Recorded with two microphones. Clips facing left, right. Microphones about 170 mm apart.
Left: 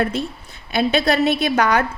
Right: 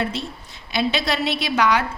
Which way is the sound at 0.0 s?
55° left (ahead or behind).